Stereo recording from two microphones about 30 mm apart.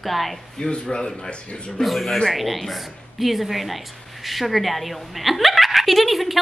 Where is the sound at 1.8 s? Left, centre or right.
Centre.